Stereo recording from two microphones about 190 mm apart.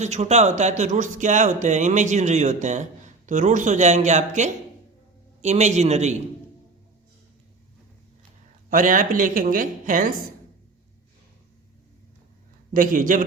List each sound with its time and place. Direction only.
0.0 s speech: 35° right (ahead or behind)
8.7 s speech: 45° right (ahead or behind)
12.7 s speech: 45° right (ahead or behind)